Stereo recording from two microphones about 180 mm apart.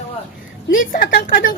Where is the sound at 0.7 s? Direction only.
50° left (ahead or behind).